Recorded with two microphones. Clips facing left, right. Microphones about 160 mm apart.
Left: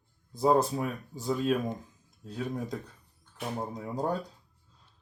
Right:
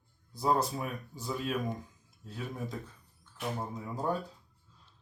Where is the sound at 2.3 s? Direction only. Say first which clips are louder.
Left 5 dB; 40° left (ahead or behind).